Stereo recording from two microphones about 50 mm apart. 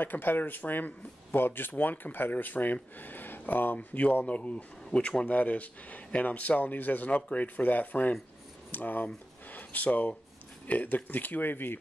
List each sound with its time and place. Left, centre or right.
0.0 s speech: left
4.9 s speech: centre
5.4 s speech: left